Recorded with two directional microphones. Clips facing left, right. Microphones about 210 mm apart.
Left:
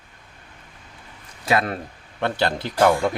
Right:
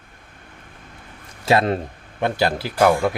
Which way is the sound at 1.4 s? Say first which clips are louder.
Right 4 dB; 25° right (ahead or behind).